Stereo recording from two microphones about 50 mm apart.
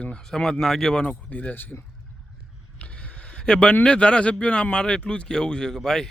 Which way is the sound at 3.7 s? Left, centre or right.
Left.